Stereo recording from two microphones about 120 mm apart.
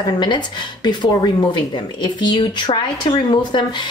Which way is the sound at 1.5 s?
40° left (ahead or behind).